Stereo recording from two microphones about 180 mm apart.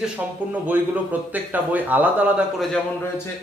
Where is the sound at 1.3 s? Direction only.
10° right (ahead or behind).